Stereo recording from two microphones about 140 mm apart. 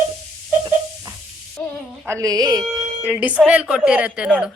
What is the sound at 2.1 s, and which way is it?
Speech, 25° right (ahead or behind).